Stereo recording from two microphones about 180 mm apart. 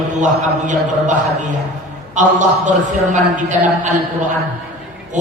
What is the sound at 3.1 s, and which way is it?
A man's voice, 40° right (ahead or behind).